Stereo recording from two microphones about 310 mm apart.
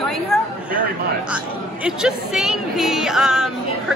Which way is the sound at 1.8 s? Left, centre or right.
Centre.